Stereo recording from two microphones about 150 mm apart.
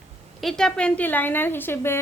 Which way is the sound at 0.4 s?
5° left (ahead or behind).